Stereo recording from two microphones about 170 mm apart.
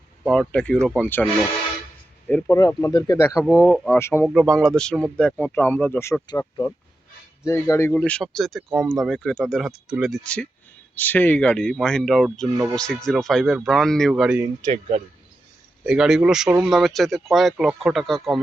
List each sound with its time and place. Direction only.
0.3 s speech: 5° left (ahead or behind)
2.2 s speech: 10° left (ahead or behind)
4.3 s speech: 5° left (ahead or behind)
14.7 s speech: 40° right (ahead or behind)
15.9 s speech: 5° right (ahead or behind)